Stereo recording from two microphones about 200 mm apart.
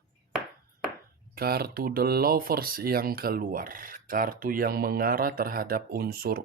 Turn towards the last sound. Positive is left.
turn(degrees=-50)  # may be behind; listen again after turning